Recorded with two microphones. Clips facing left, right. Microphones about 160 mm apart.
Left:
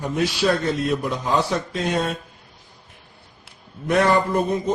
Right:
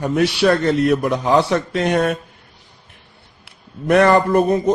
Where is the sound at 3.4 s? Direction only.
65° right (ahead or behind).